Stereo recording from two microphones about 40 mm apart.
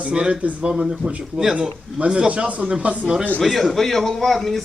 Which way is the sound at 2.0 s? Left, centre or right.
Right.